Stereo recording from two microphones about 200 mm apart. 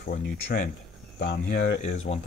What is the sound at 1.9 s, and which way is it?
Speech, 35° left (ahead or behind).